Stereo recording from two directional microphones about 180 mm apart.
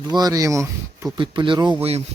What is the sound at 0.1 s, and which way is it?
Speech, 20° right (ahead or behind).